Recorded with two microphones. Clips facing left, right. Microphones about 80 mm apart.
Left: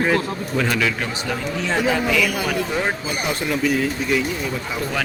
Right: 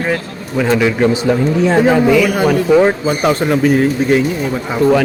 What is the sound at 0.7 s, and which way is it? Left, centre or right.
Speech, right.